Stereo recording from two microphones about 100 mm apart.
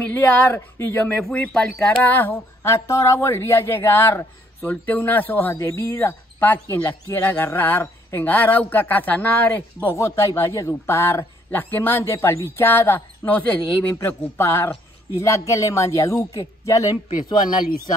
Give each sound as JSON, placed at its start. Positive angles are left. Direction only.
{"t": 0.0, "sound": "speech", "side_deg": 20}